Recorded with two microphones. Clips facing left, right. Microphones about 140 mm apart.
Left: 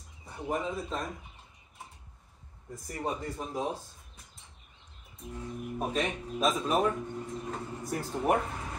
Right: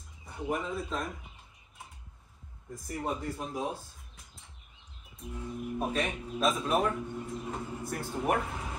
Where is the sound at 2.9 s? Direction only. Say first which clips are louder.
Even; centre (ahead or behind).